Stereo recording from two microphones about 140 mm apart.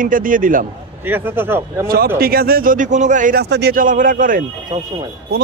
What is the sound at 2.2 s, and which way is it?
Speech, 90° right.